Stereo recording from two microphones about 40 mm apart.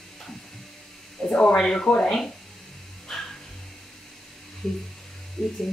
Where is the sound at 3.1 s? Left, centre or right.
Centre.